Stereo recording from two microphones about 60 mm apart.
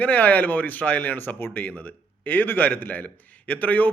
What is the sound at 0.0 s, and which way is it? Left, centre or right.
A man's voice, left.